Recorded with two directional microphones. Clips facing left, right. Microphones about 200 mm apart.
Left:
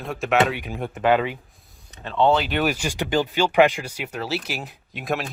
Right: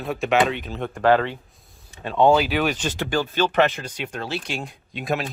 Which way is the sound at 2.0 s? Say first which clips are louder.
Right 2 dB; 10° right (ahead or behind).